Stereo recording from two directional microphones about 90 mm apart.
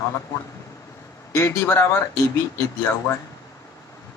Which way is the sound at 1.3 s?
30° left (ahead or behind).